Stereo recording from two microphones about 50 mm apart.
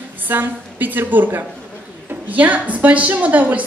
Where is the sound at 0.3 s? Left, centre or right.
Right.